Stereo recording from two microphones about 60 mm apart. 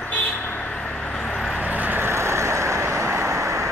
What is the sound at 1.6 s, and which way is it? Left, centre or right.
Vehicle, right.